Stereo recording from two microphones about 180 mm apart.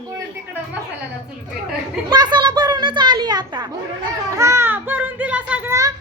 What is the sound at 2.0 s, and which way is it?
A child's voice, 25° right (ahead or behind).